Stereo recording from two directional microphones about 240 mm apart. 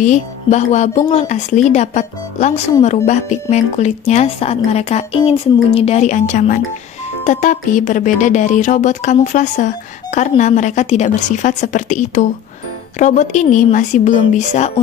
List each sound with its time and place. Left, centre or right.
0.0 s speech: left